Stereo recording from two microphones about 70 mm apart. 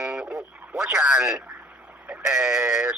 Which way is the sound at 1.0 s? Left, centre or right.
Centre.